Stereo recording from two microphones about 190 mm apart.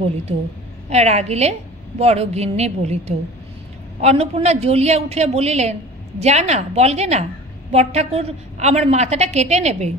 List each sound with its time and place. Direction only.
0.8 s a man's voice: 35° right (ahead or behind)